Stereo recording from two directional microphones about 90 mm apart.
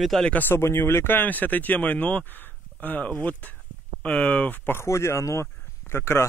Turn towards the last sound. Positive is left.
turn(degrees=30)  # may be behind; listen again after turning